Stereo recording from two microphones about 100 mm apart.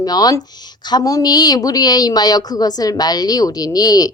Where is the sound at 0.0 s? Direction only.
40° left (ahead or behind).